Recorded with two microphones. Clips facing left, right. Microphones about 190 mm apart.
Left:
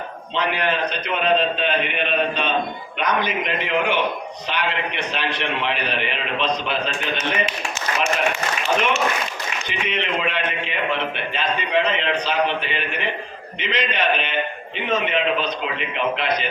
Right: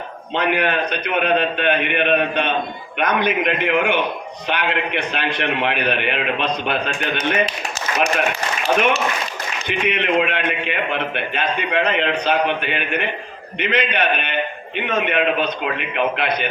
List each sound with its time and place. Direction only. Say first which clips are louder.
0.3 s a man's voice: right 3 dB; 60° right (ahead or behind)
9.6 s a man's voice: right 6 dB; 60° right (ahead or behind)